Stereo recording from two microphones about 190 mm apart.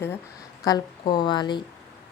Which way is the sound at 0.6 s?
20° left (ahead or behind).